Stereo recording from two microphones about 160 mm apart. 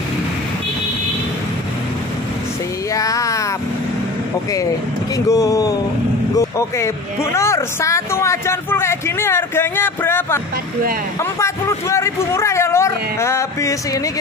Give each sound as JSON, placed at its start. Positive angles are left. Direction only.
{"t": 2.9, "sound": "a sound", "side_deg": 20}
{"t": 5.1, "sound": "speech", "side_deg": 20}
{"t": 7.3, "sound": "speech", "side_deg": 20}